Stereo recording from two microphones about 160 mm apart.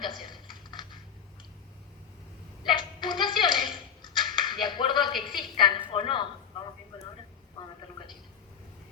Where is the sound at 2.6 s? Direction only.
30° left (ahead or behind).